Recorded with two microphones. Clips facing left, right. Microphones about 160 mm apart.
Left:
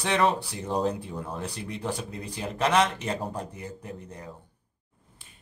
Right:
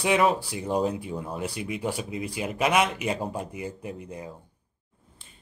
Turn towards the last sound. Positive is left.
turn(degrees=-15)  # may be behind; listen again after turning